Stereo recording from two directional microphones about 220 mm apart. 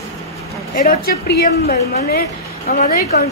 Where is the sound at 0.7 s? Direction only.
45° left (ahead or behind).